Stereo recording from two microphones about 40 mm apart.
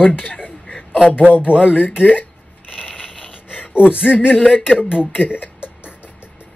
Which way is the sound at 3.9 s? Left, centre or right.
Right.